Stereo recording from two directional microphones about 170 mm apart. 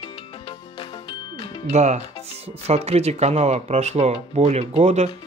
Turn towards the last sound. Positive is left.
turn(degrees=-40)  # may be behind; listen again after turning